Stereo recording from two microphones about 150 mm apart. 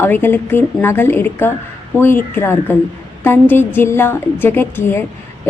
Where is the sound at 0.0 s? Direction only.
15° left (ahead or behind).